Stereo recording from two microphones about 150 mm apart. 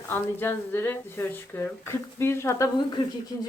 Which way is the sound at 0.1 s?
15° left (ahead or behind).